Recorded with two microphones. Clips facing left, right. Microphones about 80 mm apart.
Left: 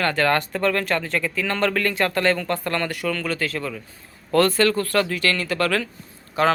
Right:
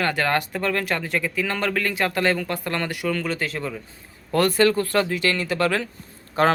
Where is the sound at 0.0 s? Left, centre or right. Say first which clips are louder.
Left 2 dB; centre.